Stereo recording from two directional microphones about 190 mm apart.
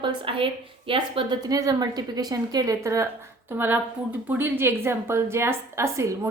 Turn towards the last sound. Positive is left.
turn(degrees=-15)  # may be behind; listen again after turning